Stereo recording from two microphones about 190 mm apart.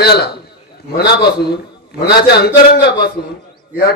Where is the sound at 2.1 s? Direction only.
60° left (ahead or behind).